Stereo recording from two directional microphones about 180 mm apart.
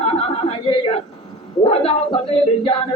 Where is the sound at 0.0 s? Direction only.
30° left (ahead or behind).